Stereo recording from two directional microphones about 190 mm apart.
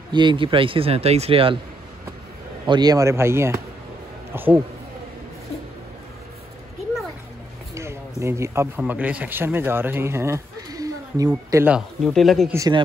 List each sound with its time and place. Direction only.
0.1 s a man's voice: 25° right (ahead or behind)
2.6 s a man's voice: 20° right (ahead or behind)
7.7 s speech: 15° right (ahead or behind)
11.7 s speech: centre (ahead or behind)
12.4 s a man's voice: 20° right (ahead or behind)